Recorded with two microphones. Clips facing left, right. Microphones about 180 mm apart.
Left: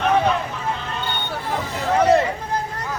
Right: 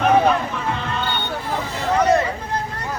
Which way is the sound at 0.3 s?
65° right (ahead or behind).